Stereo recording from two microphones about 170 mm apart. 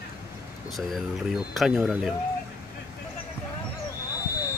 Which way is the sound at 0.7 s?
Centre (ahead or behind).